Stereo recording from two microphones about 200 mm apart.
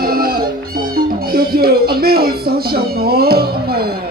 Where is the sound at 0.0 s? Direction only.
50° right (ahead or behind).